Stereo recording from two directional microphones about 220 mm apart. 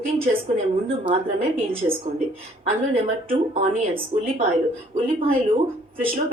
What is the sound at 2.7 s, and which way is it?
A woman's voice, 25° right (ahead or behind).